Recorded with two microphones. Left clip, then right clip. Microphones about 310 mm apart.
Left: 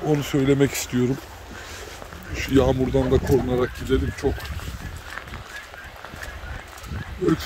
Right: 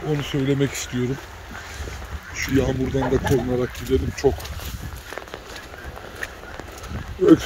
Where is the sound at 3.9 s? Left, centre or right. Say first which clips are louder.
Right 2 dB; centre.